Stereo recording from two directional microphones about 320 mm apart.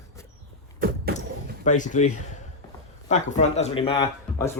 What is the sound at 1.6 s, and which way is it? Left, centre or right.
Speech, left.